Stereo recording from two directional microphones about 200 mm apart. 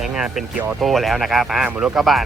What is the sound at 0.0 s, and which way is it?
Speech, 5° right (ahead or behind).